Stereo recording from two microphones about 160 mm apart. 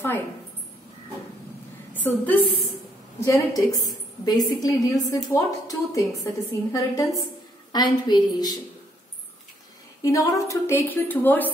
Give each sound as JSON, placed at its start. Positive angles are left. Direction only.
{"t": 2.0, "sound": "a woman's voice", "side_deg": 10}
{"t": 10.0, "sound": "a woman's voice", "side_deg": 20}